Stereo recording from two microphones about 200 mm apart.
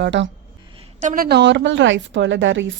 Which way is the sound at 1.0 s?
45° right (ahead or behind).